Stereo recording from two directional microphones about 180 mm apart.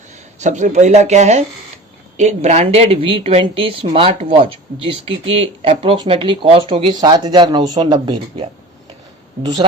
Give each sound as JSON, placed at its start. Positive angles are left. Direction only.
{"t": 0.3, "sound": "a woman's voice", "side_deg": -40}